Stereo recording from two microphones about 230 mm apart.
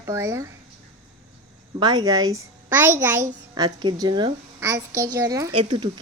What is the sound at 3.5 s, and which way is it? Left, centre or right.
A woman's voice, centre.